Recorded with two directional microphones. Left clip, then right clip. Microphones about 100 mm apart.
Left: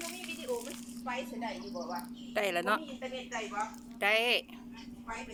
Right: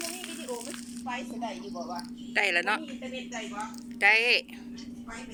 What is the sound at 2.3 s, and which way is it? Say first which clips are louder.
Speech: right 5 dB; 30° left (ahead or behind).